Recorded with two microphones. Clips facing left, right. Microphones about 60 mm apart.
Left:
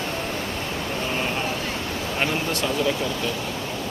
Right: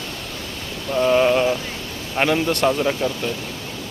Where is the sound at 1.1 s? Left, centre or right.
Right.